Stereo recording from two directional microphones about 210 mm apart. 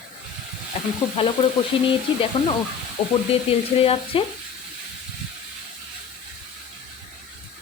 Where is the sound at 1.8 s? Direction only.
25° left (ahead or behind).